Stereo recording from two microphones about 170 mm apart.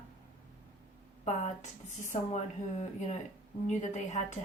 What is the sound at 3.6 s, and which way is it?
Speech, 45° left (ahead or behind).